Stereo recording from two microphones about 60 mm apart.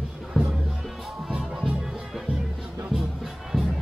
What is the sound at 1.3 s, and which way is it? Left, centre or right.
Music, centre.